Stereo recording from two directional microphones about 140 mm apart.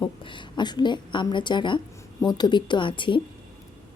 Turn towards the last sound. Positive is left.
turn(degrees=35)  # may be behind; listen again after turning